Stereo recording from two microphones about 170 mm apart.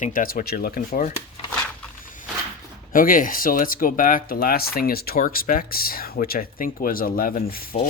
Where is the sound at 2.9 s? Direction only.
55° left (ahead or behind).